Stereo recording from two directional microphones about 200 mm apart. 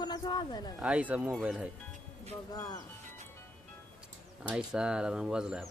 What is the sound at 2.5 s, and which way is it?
Speech, 20° left (ahead or behind).